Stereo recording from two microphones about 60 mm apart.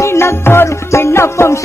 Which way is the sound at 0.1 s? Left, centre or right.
Left.